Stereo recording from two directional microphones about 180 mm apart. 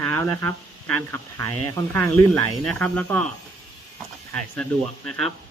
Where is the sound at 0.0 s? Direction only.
15° left (ahead or behind).